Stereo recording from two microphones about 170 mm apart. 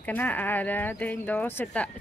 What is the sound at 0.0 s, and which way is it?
Speech, 10° left (ahead or behind).